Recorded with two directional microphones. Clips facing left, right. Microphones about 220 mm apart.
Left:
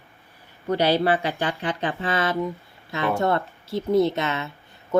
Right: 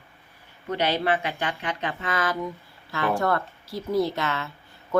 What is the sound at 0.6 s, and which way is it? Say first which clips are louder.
Speech: left 4 dB; 35° left (ahead or behind).